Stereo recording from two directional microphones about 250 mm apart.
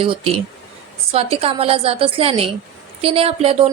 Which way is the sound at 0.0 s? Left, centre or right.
Right.